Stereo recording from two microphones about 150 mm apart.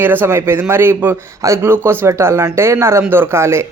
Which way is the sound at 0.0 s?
15° right (ahead or behind).